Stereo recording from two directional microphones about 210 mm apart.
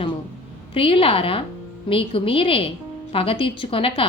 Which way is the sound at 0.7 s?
25° left (ahead or behind).